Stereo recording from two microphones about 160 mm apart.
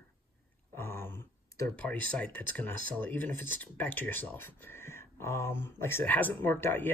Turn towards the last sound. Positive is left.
turn(degrees=15)  # may be behind; listen again after turning